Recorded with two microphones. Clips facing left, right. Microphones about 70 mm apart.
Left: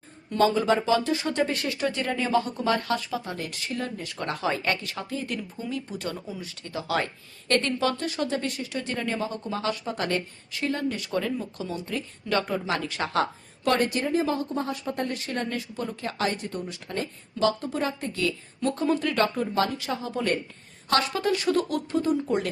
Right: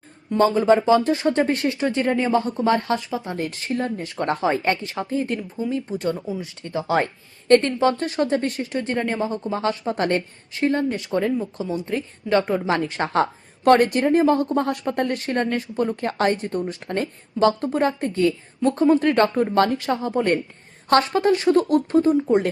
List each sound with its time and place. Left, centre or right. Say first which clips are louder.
0.3 s a woman's voice: right 5 dB; right
3.4 s a woman's voice: right 7 dB; right
9.1 s a woman's voice: right 5 dB; right
13.7 s a woman's voice: right 8 dB; right
18.1 s a woman's voice: right 8 dB; right
20.1 s a woman's voice: right 6 dB; right